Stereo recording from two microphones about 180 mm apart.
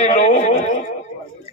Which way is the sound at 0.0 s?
40° left (ahead or behind).